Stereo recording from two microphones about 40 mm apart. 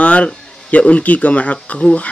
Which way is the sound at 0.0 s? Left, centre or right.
Left.